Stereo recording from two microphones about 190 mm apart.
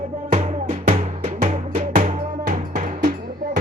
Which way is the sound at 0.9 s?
35° right (ahead or behind).